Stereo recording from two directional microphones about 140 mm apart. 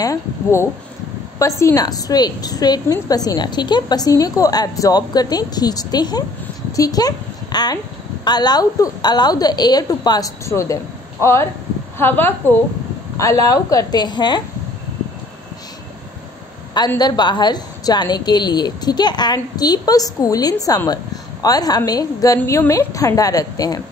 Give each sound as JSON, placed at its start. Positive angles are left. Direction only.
{"t": 0.0, "sound": "a woman's voice", "side_deg": 20}
{"t": 13.2, "sound": "speech", "side_deg": 25}
{"t": 17.0, "sound": "speech", "side_deg": 30}